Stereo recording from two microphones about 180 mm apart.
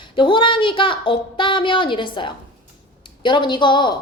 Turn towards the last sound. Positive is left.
turn(degrees=25)  # may be behind; listen again after turning